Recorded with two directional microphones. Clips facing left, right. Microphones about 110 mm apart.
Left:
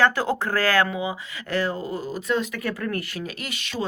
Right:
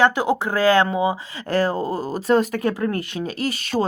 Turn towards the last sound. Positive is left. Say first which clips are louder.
# right 9 dB
turn(degrees=-40)  # may be behind; listen again after turning